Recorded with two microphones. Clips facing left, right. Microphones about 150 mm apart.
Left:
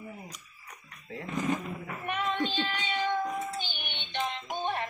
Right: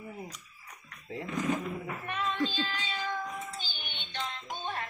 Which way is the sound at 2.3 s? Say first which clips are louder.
Left 1 dB; 25° left (ahead or behind).